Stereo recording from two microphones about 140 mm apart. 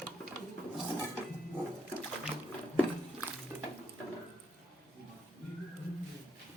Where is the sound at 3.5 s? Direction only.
15° right (ahead or behind).